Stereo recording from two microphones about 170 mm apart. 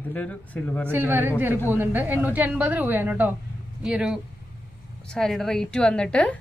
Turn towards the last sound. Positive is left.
turn(degrees=5)  # may be behind; listen again after turning